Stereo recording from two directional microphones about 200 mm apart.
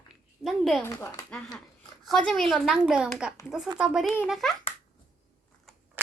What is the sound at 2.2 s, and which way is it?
A child's voice, centre (ahead or behind).